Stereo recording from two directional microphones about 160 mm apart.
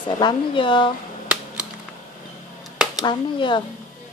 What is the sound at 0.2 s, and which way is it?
Speech, 30° left (ahead or behind).